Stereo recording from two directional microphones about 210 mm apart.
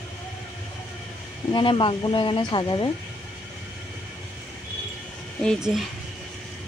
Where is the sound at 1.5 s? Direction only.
25° left (ahead or behind).